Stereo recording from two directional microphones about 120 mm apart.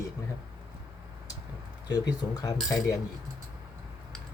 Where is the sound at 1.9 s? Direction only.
35° left (ahead or behind).